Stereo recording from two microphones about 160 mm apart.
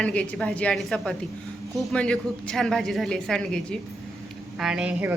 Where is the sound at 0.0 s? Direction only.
5° left (ahead or behind).